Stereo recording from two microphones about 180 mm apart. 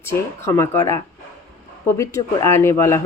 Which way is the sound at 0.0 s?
15° left (ahead or behind).